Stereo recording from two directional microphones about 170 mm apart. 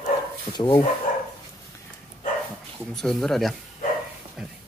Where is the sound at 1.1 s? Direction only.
50° left (ahead or behind).